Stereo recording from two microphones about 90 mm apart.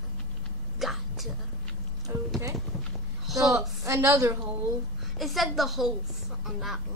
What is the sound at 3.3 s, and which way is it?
A woman's voice, 40° right (ahead or behind).